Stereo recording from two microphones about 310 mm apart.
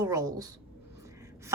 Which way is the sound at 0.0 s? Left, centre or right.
Centre.